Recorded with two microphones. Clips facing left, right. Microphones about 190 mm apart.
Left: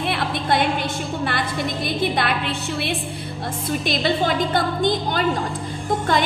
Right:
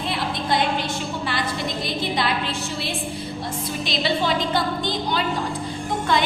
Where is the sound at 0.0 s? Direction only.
60° left (ahead or behind).